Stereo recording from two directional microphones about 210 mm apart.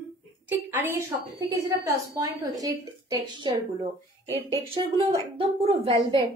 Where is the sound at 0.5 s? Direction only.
10° right (ahead or behind).